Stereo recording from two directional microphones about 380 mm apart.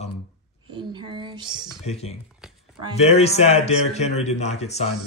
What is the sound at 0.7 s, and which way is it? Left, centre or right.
Speech, centre.